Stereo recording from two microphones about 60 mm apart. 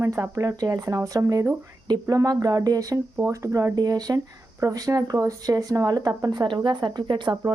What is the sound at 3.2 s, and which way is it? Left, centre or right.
Speech, right.